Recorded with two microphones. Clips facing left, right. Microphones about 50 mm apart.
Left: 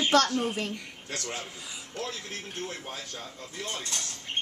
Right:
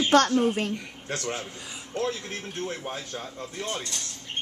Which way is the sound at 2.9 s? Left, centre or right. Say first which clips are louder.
Right 4 dB; right.